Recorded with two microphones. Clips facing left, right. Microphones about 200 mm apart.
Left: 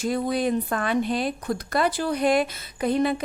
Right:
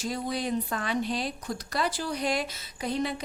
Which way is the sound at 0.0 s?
55° left (ahead or behind).